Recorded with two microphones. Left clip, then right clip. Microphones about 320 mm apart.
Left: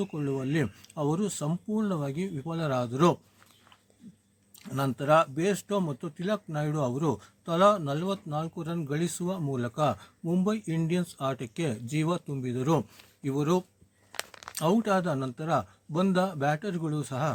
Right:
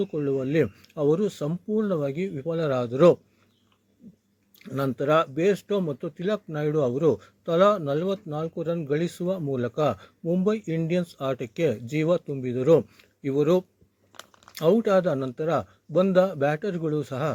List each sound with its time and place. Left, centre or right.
0.2 s speech: centre
4.6 s speech: centre
14.1 s a sound: left
14.5 s speech: centre